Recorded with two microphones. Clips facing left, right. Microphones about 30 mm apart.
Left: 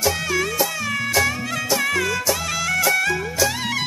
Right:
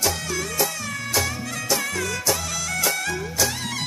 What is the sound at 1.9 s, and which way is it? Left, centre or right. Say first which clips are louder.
Music: left 6 dB; left.